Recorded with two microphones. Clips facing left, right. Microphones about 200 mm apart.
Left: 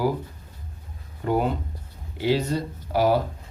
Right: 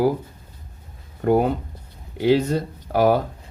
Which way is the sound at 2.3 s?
50° right (ahead or behind).